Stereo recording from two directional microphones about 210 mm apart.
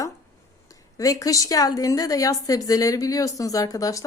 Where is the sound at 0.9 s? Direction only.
15° left (ahead or behind).